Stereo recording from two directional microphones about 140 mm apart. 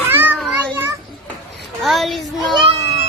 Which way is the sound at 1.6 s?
Centre (ahead or behind).